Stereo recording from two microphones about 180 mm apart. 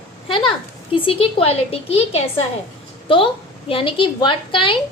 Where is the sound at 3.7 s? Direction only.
30° left (ahead or behind).